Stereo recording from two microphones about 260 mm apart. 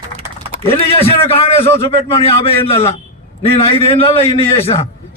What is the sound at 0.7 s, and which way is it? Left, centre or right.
A man's voice, left.